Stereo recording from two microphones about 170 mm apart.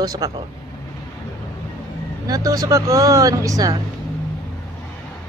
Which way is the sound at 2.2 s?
20° right (ahead or behind).